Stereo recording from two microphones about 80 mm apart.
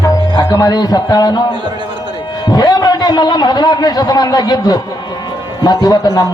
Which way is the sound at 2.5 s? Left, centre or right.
Left.